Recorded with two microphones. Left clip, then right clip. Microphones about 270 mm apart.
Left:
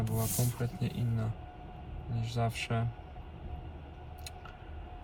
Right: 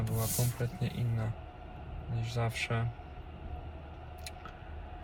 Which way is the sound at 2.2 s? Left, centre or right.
Centre.